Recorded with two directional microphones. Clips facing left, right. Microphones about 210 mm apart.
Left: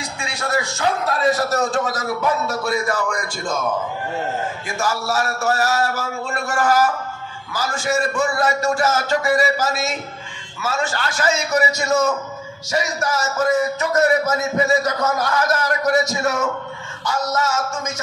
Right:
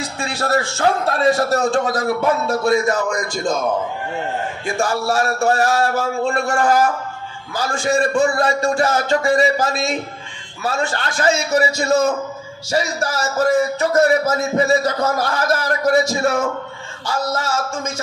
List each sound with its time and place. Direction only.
0.2 s a man's voice: 35° right (ahead or behind)
4.6 s a man's voice: 30° right (ahead or behind)
11.0 s a man's voice: 30° right (ahead or behind)